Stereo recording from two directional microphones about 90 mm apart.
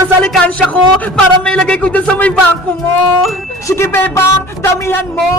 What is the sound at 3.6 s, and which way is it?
Speech, 30° left (ahead or behind).